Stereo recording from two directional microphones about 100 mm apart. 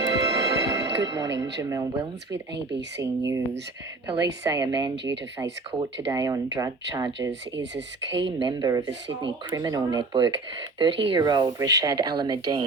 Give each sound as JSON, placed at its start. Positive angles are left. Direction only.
{"t": 0.0, "sound": "music", "side_deg": -35}
{"t": 3.0, "sound": "a woman's voice", "side_deg": -30}
{"t": 8.4, "sound": "speech", "side_deg": -50}
{"t": 10.0, "sound": "speech", "side_deg": -55}